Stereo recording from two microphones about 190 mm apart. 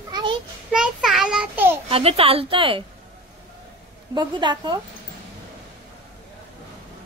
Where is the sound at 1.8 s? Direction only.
30° right (ahead or behind).